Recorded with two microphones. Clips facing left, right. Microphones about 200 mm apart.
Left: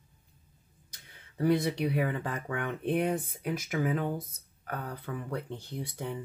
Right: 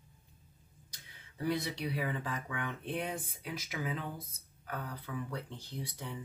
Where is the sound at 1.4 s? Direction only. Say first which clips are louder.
Left 8 dB; 55° left (ahead or behind).